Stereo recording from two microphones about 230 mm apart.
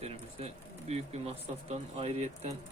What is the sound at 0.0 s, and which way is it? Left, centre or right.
Speech, right.